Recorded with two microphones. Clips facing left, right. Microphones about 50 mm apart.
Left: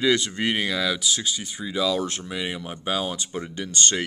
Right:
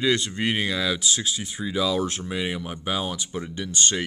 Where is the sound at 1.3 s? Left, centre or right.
Centre.